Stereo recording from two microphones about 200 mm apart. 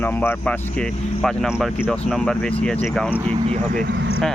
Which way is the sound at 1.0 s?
35° left (ahead or behind).